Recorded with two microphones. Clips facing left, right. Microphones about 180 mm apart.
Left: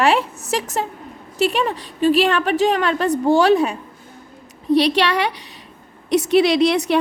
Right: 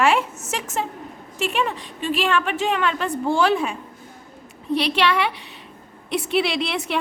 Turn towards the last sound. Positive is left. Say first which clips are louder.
# left 9 dB
turn(degrees=40)  # may be behind; listen again after turning